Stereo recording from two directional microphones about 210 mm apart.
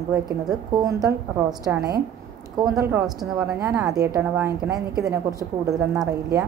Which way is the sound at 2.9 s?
Centre (ahead or behind).